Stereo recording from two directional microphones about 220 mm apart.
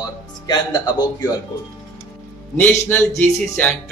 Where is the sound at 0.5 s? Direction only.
20° left (ahead or behind).